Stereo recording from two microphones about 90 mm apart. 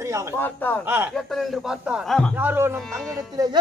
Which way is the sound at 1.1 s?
5° left (ahead or behind).